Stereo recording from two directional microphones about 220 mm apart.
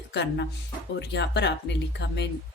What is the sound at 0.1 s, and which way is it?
Speech, 50° left (ahead or behind).